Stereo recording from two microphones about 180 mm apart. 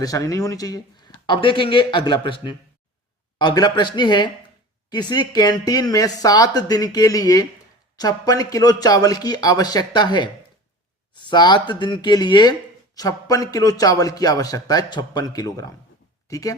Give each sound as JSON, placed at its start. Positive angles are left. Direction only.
{"t": 0.0, "sound": "a man's voice", "side_deg": 20}